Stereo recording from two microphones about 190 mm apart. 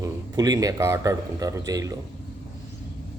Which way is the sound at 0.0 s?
20° right (ahead or behind).